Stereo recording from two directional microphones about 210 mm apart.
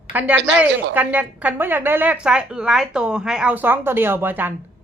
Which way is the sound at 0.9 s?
10° right (ahead or behind).